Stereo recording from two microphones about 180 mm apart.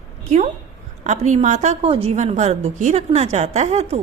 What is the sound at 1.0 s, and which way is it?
A woman's voice, 40° right (ahead or behind).